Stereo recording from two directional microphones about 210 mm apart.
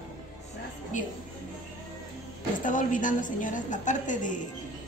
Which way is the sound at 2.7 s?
40° left (ahead or behind).